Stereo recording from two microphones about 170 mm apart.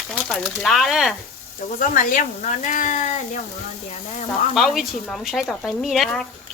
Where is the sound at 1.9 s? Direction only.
50° left (ahead or behind).